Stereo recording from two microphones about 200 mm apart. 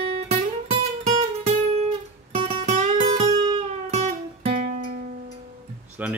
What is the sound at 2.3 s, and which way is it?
Music, 30° right (ahead or behind).